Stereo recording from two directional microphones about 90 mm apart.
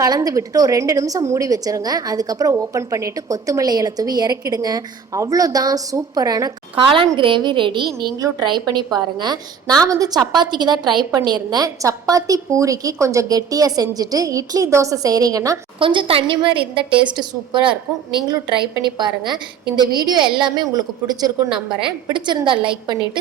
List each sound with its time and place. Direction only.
0.0 s a woman's voice: 45° right (ahead or behind)
7.2 s a woman's voice: 65° right (ahead or behind)
8.2 s a woman's voice: 50° right (ahead or behind)
15.8 s a woman's voice: 70° right (ahead or behind)
17.1 s a woman's voice: 60° right (ahead or behind)
21.5 s a woman's voice: 10° right (ahead or behind)
22.1 s a woman's voice: 60° right (ahead or behind)